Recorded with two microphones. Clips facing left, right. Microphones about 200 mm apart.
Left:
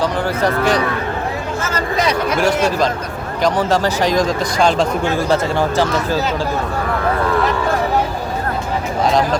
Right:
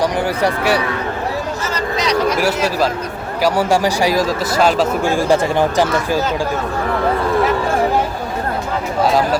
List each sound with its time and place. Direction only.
0.0 s a man's voice: 10° right (ahead or behind)
1.6 s a sound: 50° left (ahead or behind)
2.4 s a man's voice: 5° right (ahead or behind)